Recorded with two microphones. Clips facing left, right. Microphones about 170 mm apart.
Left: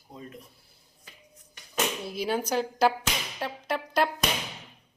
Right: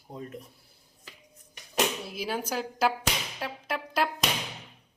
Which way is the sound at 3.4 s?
5° right (ahead or behind).